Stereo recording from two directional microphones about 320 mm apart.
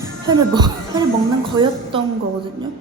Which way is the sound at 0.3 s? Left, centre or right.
Centre.